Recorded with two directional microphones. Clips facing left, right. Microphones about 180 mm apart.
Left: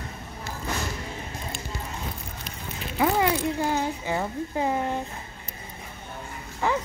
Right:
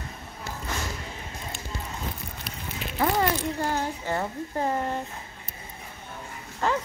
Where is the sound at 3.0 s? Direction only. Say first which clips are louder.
Left 2 dB; 10° left (ahead or behind).